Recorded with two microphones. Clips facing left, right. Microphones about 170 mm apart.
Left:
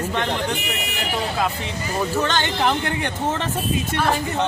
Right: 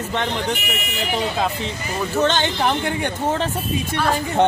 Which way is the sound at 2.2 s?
20° right (ahead or behind).